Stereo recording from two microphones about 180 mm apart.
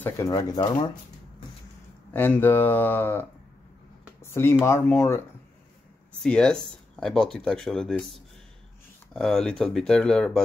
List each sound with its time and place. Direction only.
0.0 s speech: 20° left (ahead or behind)
2.1 s speech: 10° left (ahead or behind)
4.2 s a sound: 15° left (ahead or behind)
4.6 s speech: 15° left (ahead or behind)
6.2 s speech: 5° left (ahead or behind)